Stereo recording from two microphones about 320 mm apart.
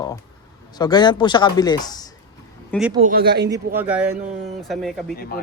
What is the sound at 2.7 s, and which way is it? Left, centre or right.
Speech, centre.